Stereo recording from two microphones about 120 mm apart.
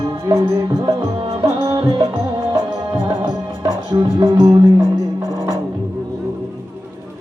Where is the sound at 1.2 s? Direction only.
55° right (ahead or behind).